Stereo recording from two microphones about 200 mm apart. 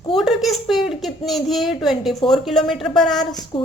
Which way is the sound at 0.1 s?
Centre (ahead or behind).